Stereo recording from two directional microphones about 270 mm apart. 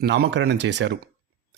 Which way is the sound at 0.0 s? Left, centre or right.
Right.